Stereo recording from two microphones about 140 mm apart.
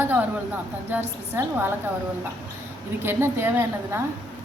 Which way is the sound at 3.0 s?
15° right (ahead or behind).